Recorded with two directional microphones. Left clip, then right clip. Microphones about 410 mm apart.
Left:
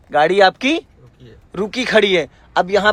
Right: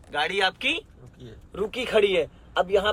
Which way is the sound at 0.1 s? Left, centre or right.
Centre.